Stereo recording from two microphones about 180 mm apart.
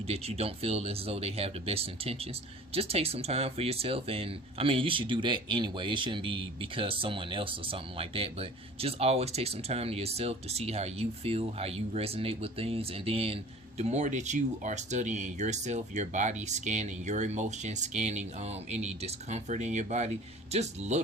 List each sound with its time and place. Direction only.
0.1 s speech: 35° right (ahead or behind)